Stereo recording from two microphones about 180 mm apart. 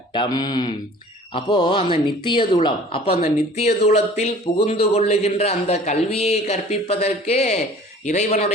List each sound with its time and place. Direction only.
0.1 s speech: 25° left (ahead or behind)